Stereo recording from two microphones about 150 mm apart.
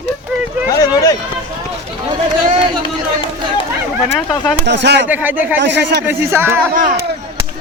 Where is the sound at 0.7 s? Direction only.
25° left (ahead or behind).